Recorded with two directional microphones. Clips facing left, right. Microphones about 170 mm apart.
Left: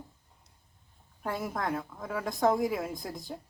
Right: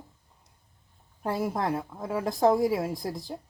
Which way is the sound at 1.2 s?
30° right (ahead or behind).